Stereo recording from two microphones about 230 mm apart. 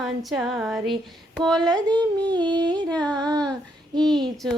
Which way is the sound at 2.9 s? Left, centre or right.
Centre.